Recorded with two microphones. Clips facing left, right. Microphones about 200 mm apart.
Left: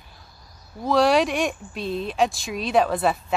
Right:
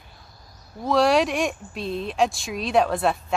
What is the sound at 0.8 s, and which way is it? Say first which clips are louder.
Speech: even; centre (ahead or behind).